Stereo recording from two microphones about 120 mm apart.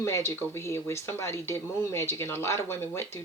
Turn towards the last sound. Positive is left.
turn(degrees=20)  # may be behind; listen again after turning